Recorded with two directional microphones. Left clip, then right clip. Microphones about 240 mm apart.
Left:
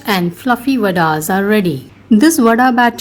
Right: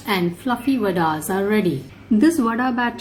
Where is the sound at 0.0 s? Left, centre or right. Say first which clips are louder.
Left 6 dB; left.